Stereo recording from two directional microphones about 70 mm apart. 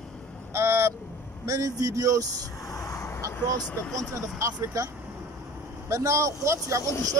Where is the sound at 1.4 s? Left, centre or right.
Right.